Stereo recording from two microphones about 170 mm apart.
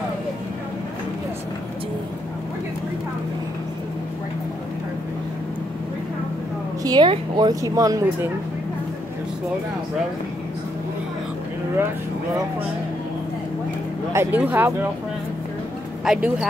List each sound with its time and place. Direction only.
6.8 s a woman's voice: 25° right (ahead or behind)
14.1 s speech: 15° right (ahead or behind)
16.1 s speech: 5° right (ahead or behind)